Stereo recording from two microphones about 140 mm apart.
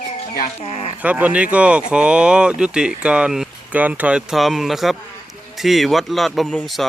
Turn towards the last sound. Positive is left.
turn(degrees=0)  # may be behind; listen again after turning